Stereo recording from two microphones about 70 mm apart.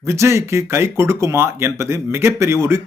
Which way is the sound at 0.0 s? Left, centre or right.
Right.